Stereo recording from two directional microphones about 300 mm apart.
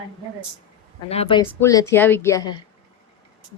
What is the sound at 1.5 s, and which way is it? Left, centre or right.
Speech, centre.